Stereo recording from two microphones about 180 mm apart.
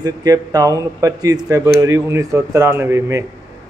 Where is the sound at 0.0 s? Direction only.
20° right (ahead or behind).